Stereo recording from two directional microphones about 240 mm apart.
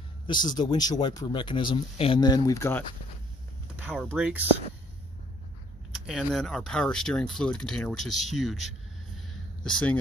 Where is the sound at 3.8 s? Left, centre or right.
Centre.